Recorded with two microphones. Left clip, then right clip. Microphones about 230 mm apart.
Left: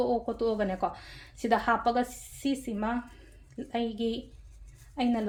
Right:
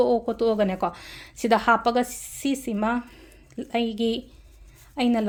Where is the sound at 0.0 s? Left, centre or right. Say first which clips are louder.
Right 7 dB; right.